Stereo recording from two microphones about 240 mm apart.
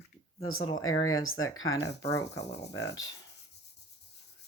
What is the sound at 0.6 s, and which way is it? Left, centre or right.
Speech, centre.